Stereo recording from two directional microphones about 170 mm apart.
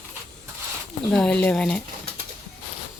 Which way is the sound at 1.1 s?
5° left (ahead or behind).